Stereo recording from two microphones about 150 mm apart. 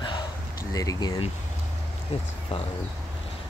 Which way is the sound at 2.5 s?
35° left (ahead or behind).